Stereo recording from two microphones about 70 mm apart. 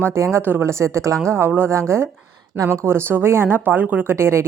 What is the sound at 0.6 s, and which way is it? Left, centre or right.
A woman's voice, right.